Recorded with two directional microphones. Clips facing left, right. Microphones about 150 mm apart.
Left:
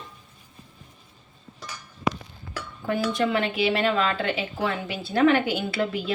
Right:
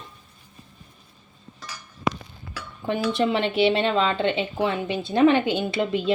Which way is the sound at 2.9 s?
25° right (ahead or behind).